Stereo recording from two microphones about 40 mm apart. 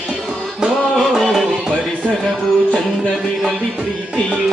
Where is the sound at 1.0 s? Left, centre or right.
Centre.